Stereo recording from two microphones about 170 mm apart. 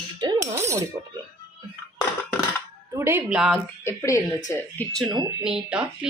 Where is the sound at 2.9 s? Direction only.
15° right (ahead or behind).